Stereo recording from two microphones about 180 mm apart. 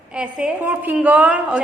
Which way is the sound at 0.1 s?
5° right (ahead or behind).